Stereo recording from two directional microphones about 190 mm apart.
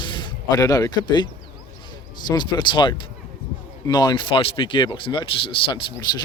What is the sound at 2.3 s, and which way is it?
Speech, 25° left (ahead or behind).